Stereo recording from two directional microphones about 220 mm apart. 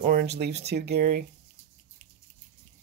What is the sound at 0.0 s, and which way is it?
Speech, 40° right (ahead or behind).